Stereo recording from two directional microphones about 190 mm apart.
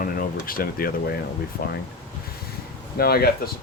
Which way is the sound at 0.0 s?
50° left (ahead or behind).